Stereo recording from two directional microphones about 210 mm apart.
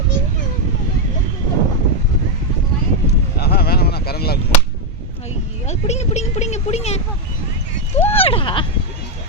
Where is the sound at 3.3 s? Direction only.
50° left (ahead or behind).